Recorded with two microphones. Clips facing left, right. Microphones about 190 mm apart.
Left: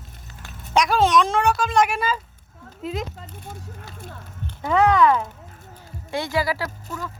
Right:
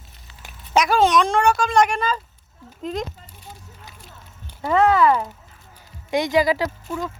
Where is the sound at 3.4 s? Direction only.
55° left (ahead or behind).